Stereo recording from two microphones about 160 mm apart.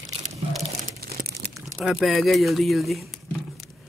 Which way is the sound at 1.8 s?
Centre (ahead or behind).